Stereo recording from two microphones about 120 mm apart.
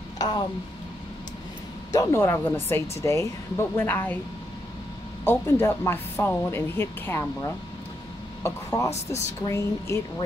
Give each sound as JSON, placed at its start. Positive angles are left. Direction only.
{"t": 0.2, "sound": "speech", "side_deg": 35}
{"t": 1.9, "sound": "speech", "side_deg": 25}
{"t": 5.2, "sound": "speech", "side_deg": 20}
{"t": 8.4, "sound": "speech", "side_deg": 25}